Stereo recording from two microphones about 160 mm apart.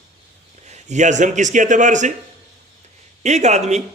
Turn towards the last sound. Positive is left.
turn(degrees=-45)  # may be behind; listen again after turning